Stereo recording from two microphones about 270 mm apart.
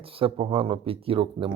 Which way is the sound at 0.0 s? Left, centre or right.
Right.